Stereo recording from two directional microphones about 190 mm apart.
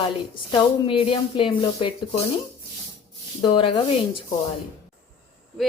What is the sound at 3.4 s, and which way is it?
Speech, 25° left (ahead or behind).